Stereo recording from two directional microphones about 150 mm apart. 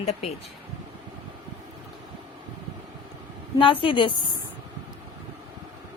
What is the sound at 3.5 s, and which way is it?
Speech, 35° left (ahead or behind).